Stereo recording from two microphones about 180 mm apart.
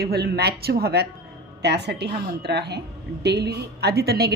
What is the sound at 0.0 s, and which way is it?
A woman's voice, 60° right (ahead or behind).